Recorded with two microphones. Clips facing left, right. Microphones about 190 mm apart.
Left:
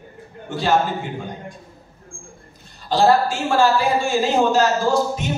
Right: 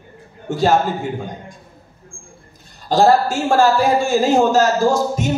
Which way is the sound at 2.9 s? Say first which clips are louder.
Right 3 dB; 45° right (ahead or behind).